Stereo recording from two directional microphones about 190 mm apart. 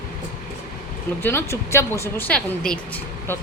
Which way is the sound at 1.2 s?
10° left (ahead or behind).